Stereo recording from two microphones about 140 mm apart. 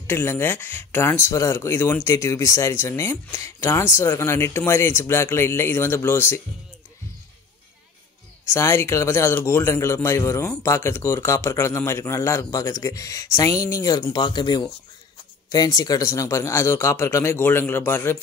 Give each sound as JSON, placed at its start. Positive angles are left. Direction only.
{"t": 0.0, "sound": "speech", "side_deg": 15}
{"t": 8.5, "sound": "a man's voice", "side_deg": 20}